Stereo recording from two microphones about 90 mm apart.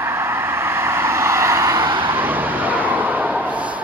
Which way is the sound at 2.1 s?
20° right (ahead or behind).